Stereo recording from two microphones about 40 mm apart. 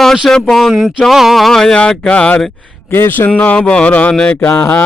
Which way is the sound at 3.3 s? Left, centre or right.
Left.